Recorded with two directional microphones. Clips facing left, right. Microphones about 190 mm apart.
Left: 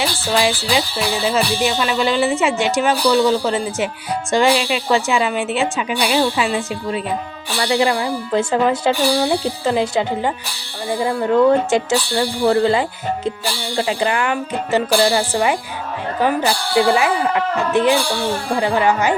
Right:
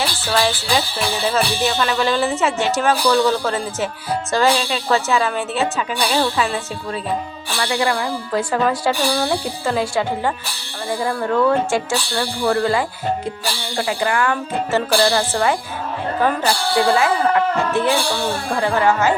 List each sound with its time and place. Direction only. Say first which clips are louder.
0.3 s a woman's voice: left 1 dB; 15° left (ahead or behind)